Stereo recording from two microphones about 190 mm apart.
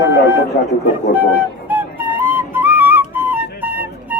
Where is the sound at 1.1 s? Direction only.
10° right (ahead or behind).